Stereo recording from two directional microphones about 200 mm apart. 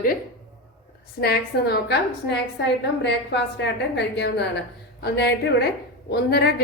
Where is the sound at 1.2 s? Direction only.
55° left (ahead or behind).